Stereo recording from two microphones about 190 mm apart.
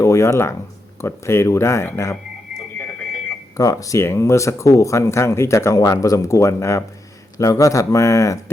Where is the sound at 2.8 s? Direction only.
5° left (ahead or behind).